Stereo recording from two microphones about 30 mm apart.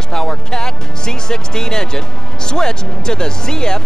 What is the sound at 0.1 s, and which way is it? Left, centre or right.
Speech, left.